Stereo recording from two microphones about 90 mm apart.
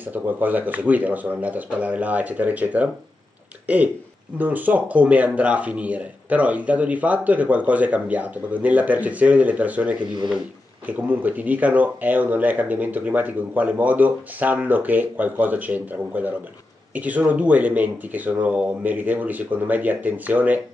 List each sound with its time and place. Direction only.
0.0 s speech: 20° right (ahead or behind)